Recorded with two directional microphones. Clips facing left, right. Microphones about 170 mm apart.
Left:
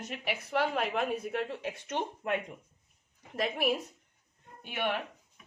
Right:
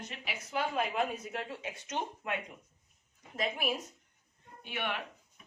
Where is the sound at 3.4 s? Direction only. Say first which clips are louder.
Left 4 dB; 65° left (ahead or behind).